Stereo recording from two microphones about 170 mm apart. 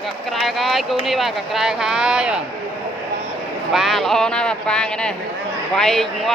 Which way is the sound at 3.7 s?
Centre (ahead or behind).